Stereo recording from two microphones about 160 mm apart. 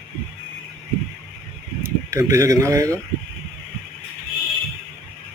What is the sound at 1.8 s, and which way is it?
Speech, 20° right (ahead or behind).